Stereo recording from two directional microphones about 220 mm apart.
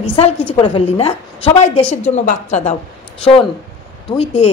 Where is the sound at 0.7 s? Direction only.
25° left (ahead or behind).